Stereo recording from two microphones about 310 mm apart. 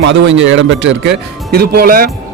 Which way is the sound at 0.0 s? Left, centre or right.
Right.